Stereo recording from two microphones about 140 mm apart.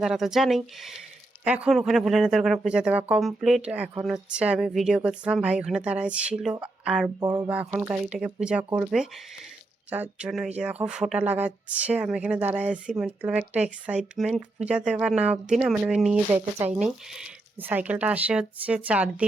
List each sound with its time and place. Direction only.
0.0 s speech: 5° right (ahead or behind)
7.2 s speech: 30° right (ahead or behind)
7.4 s speech: 10° right (ahead or behind)